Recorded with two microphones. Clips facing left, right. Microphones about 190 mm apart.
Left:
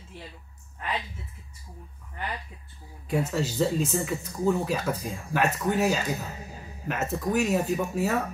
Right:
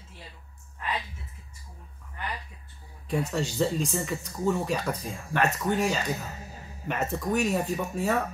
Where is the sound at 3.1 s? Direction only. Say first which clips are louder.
Left 1 dB; 5° left (ahead or behind).